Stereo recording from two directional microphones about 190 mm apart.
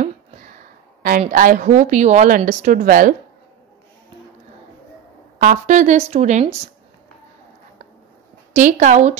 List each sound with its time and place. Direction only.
0.0 s a sound: 45° right (ahead or behind)
1.3 s a woman's voice: 45° right (ahead or behind)
5.4 s speech: 40° right (ahead or behind)
8.5 s speech: 40° right (ahead or behind)